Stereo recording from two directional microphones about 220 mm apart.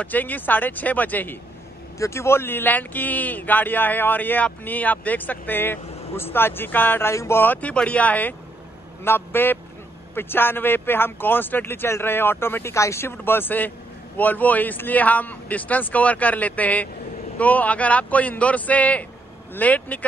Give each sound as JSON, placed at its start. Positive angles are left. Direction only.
{"t": 0.0, "sound": "speech", "side_deg": 10}